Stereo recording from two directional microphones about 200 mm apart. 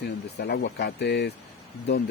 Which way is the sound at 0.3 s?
55° left (ahead or behind).